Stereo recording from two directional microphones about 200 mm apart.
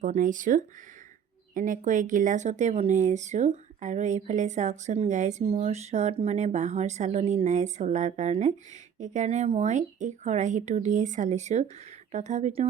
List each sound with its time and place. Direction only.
0.0 s speech: 40° right (ahead or behind)